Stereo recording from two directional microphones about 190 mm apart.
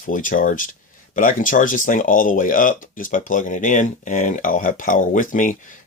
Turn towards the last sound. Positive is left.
turn(degrees=45)  # may be behind; listen again after turning